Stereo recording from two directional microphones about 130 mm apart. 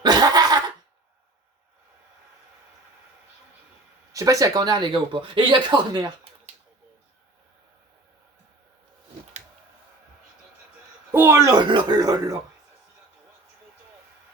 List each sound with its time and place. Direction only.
0.0 s cough: 30° right (ahead or behind)
4.1 s speech: 25° right (ahead or behind)
11.1 s speech: 15° right (ahead or behind)
11.5 s speech: 35° right (ahead or behind)